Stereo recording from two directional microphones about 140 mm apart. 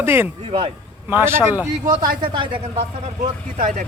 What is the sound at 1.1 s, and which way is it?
Speech, 15° right (ahead or behind).